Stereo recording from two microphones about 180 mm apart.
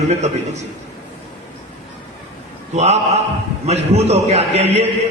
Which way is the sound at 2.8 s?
40° right (ahead or behind).